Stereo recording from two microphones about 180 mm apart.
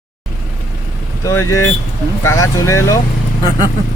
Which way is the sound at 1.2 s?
15° left (ahead or behind).